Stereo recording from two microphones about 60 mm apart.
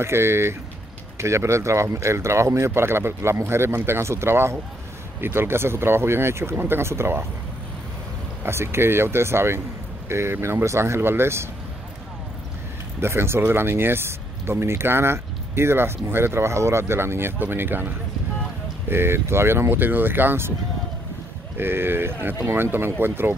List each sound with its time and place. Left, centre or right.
0.0 s speech: right
8.5 s speech: right
10.6 s speech: right
13.0 s speech: right
21.5 s speech: right